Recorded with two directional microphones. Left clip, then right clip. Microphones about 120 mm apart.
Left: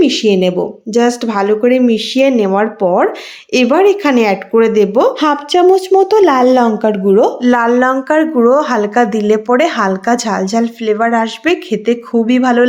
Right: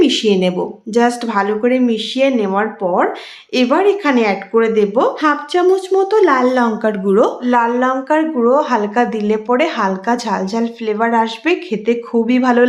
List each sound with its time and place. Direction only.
0.0 s speech: 25° left (ahead or behind); by 6.7 s 50° left (ahead or behind)
7.1 s speech: 15° left (ahead or behind)
7.4 s speech: 55° left (ahead or behind); by 12.6 s 15° left (ahead or behind)